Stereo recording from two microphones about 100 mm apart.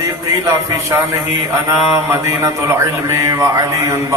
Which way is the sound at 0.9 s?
25° right (ahead or behind).